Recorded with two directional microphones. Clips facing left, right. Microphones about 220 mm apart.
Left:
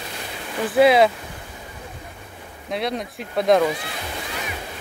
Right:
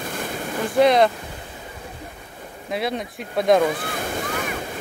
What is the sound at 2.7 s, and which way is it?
Speech, centre (ahead or behind).